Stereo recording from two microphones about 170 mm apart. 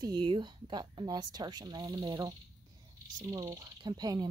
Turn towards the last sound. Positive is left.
turn(degrees=-25)  # may be behind; listen again after turning